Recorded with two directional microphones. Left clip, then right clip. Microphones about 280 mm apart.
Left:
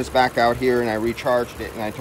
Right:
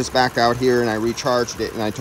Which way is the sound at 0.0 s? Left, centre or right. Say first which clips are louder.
Even; centre.